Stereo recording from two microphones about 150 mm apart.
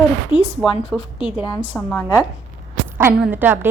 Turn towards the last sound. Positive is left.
turn(degrees=-15)  # may be behind; listen again after turning